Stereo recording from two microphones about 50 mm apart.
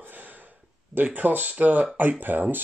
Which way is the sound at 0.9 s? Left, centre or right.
Right.